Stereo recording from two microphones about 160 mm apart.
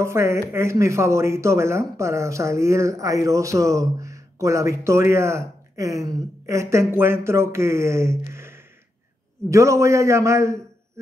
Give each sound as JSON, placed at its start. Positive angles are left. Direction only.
{"t": 0.0, "sound": "a man's voice", "side_deg": -15}